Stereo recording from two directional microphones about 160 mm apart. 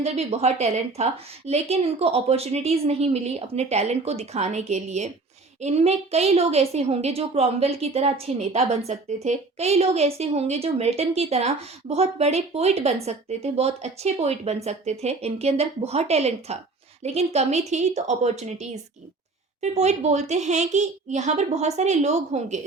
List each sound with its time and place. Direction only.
0.0 s a woman's voice: 40° right (ahead or behind)